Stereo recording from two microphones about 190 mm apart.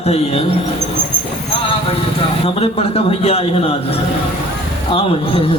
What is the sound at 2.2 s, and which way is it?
A man's voice, 30° left (ahead or behind).